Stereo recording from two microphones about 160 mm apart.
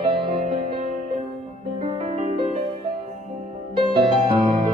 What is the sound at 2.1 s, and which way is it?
Music, 45° right (ahead or behind).